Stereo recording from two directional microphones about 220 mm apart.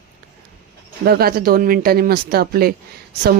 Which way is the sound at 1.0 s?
45° right (ahead or behind).